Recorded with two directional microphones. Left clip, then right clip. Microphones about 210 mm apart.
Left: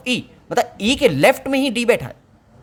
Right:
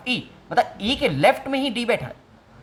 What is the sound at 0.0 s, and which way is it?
A woman's voice, 50° left (ahead or behind).